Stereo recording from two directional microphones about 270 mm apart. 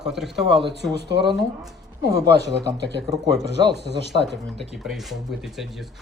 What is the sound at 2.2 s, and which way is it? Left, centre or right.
Speech, right.